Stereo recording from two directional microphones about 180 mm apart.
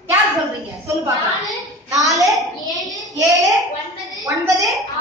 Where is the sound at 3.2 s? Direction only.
20° right (ahead or behind).